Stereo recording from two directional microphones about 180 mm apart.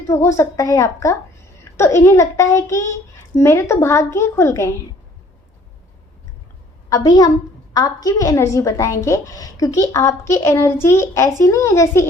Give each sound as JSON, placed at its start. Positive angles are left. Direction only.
{"t": 0.1, "sound": "a woman's voice", "side_deg": 15}
{"t": 6.9, "sound": "a woman's voice", "side_deg": 20}